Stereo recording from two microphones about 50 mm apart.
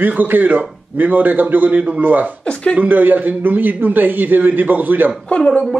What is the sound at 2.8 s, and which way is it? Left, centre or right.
A man's voice, right.